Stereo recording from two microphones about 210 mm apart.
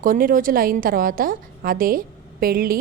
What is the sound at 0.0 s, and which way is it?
A woman's voice, 40° right (ahead or behind).